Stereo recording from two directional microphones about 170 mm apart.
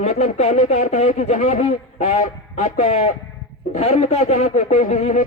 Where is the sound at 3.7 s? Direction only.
45° left (ahead or behind).